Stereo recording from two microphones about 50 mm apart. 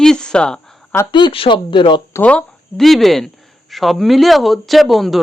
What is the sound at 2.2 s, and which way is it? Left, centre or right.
Speech, left.